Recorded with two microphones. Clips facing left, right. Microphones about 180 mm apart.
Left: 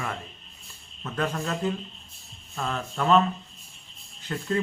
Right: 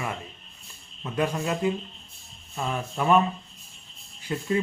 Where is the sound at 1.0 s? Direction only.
10° right (ahead or behind).